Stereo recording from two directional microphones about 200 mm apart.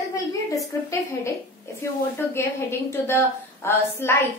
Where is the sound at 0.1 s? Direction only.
15° left (ahead or behind).